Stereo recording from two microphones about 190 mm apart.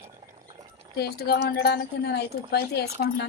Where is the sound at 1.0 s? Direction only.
55° left (ahead or behind).